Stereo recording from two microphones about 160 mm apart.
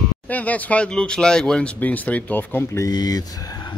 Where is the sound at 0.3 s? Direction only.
10° left (ahead or behind).